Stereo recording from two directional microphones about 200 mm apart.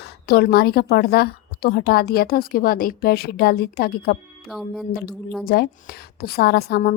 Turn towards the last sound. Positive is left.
turn(degrees=50)  # may be behind; listen again after turning